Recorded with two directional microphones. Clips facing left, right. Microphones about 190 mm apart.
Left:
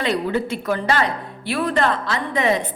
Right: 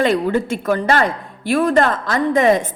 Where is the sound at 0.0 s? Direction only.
50° right (ahead or behind).